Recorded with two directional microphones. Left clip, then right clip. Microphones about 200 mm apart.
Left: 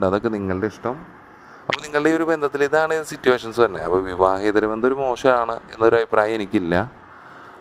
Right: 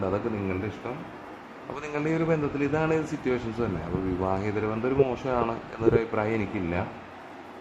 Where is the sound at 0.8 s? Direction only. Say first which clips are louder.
Left 8 dB; 55° left (ahead or behind).